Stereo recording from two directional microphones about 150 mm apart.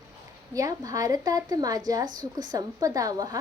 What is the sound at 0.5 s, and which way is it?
Speech, 25° right (ahead or behind).